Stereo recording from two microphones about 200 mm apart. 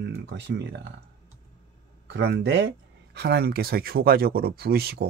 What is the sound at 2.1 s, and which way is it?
Speech, 60° right (ahead or behind).